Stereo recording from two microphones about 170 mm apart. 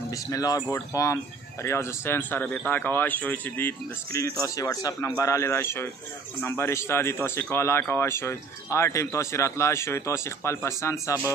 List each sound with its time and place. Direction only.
0.1 s speech: 20° left (ahead or behind)